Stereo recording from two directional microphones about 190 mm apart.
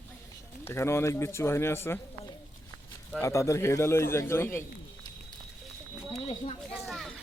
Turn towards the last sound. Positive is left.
turn(degrees=0)  # may be behind; listen again after turning